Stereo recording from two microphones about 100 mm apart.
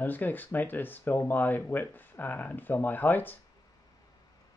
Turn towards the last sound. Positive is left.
turn(degrees=20)  # may be behind; listen again after turning